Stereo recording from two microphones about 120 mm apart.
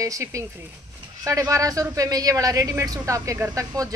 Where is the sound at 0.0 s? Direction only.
25° right (ahead or behind).